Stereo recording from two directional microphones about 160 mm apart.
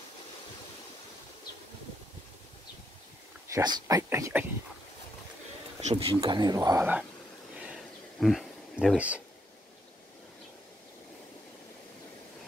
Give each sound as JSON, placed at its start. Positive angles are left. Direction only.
{"t": 3.4, "sound": "speech", "side_deg": -25}
{"t": 5.8, "sound": "speech", "side_deg": -40}
{"t": 7.5, "sound": "a sound", "side_deg": -5}